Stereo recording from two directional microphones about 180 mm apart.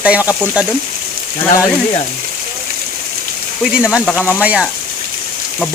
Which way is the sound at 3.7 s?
5° right (ahead or behind).